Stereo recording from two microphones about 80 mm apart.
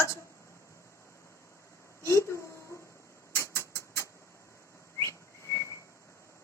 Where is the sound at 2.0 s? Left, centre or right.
Left.